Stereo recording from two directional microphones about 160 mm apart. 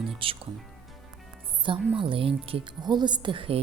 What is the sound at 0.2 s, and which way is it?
Speech, 35° right (ahead or behind).